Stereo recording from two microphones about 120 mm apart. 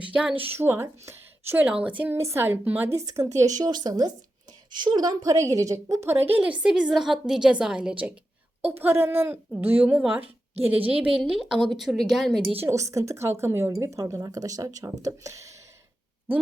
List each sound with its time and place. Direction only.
0.1 s a woman's voice: 10° right (ahead or behind)
6.3 s a woman's voice: 10° right (ahead or behind)
12.5 s a woman's voice: 25° right (ahead or behind)